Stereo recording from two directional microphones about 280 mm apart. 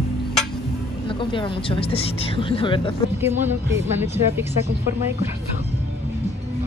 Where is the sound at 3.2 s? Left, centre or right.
Centre.